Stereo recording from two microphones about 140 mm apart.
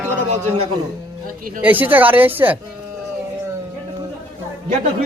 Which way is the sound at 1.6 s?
15° right (ahead or behind).